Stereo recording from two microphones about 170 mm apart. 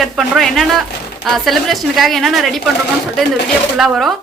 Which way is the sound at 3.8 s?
Centre (ahead or behind).